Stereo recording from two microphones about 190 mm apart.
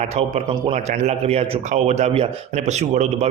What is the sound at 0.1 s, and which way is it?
Speech, 35° right (ahead or behind).